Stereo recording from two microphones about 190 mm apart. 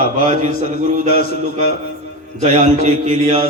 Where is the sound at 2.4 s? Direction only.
35° right (ahead or behind).